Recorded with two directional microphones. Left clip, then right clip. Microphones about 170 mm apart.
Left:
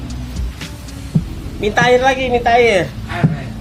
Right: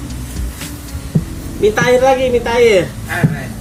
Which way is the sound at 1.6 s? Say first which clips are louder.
Right 1 dB; 50° left (ahead or behind).